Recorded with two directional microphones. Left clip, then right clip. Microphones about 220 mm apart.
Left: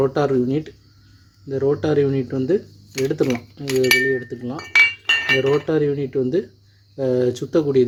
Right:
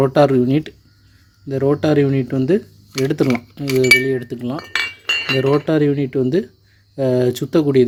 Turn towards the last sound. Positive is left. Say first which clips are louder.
# right 3 dB
turn(degrees=-35)  # may be behind; listen again after turning